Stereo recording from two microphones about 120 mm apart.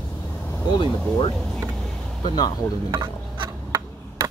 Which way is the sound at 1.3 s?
Centre (ahead or behind).